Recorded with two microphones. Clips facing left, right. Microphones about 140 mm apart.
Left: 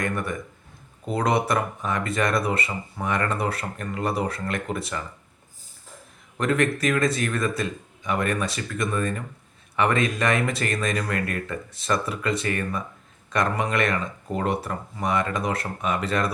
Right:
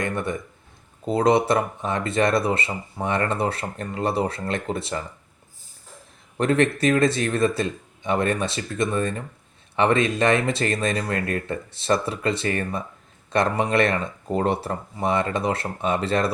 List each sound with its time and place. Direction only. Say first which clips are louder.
0.0 s speech: right 1 dB; 25° right (ahead or behind)
6.3 s speech: right 3 dB; 30° right (ahead or behind)